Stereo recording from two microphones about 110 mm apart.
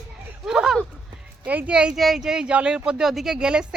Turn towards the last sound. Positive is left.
turn(degrees=-10)  # may be behind; listen again after turning